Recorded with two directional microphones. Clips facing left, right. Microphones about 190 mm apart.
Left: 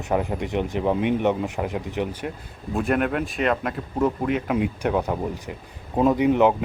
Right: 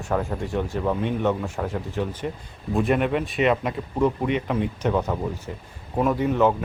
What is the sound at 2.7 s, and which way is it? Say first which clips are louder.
Speech: right 1 dB; centre (ahead or behind).